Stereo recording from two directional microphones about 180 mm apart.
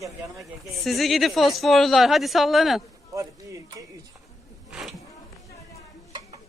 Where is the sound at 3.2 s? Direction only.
20° right (ahead or behind).